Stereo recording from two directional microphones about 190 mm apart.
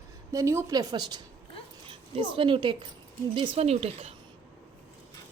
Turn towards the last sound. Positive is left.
turn(degrees=-30)  # may be behind; listen again after turning